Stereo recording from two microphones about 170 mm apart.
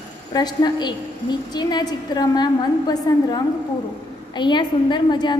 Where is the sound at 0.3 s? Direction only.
25° left (ahead or behind).